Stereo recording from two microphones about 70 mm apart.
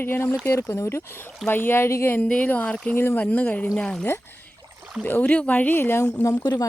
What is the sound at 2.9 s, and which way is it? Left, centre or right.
Speech, left.